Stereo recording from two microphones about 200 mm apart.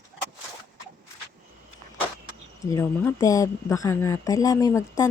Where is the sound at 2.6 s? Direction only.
15° left (ahead or behind).